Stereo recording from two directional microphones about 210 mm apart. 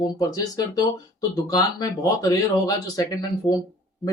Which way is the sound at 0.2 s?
15° left (ahead or behind).